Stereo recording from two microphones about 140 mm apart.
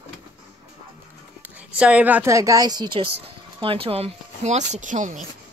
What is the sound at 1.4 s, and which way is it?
Speech, 10° right (ahead or behind).